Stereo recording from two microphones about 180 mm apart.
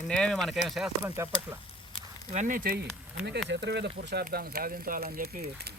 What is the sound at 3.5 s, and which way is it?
Speech, 75° right (ahead or behind).